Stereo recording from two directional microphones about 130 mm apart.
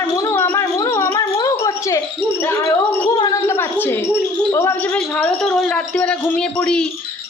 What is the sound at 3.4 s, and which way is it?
A woman's voice, 20° left (ahead or behind).